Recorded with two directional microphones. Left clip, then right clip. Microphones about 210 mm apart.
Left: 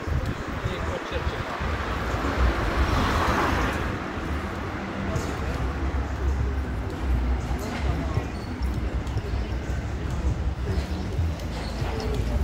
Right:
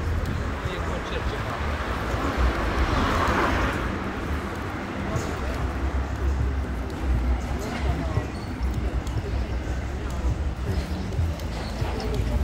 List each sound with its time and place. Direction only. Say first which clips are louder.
3.0 s vehicle: right 1 dB; 50° left (ahead or behind)